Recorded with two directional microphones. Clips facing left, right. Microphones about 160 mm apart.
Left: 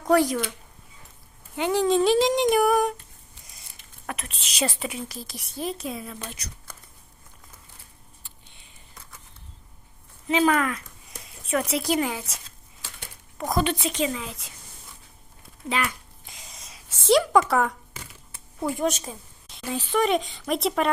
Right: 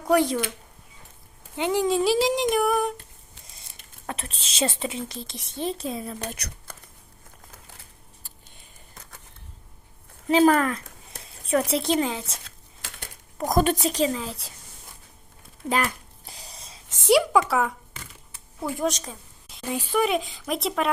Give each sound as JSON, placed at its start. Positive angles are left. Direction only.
{"t": 0.1, "sound": "speech", "side_deg": -15}
{"t": 1.5, "sound": "speech", "side_deg": -15}
{"t": 4.0, "sound": "speech", "side_deg": -30}
{"t": 6.2, "sound": "speech", "side_deg": -65}
{"t": 8.2, "sound": "a sound", "side_deg": -45}
{"t": 10.2, "sound": "a woman's voice", "side_deg": -40}
{"t": 13.5, "sound": "a woman's voice", "side_deg": -45}
{"t": 15.7, "sound": "a sound", "side_deg": -40}
{"t": 17.0, "sound": "speech", "side_deg": -10}
{"t": 18.8, "sound": "speech", "side_deg": 5}
{"t": 19.6, "sound": "speech", "side_deg": -15}